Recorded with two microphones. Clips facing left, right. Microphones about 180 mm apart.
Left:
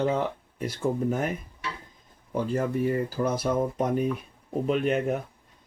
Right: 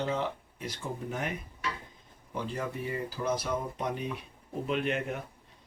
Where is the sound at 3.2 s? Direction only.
55° left (ahead or behind).